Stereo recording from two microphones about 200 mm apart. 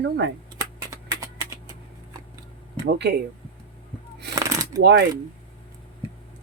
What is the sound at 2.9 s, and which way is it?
Speech, 55° right (ahead or behind).